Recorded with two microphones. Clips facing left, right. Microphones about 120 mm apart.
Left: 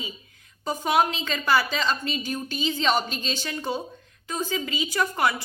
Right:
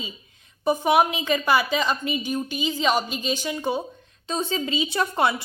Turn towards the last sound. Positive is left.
turn(degrees=-25)  # may be behind; listen again after turning